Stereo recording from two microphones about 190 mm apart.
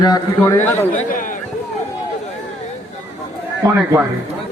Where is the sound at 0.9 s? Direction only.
45° left (ahead or behind).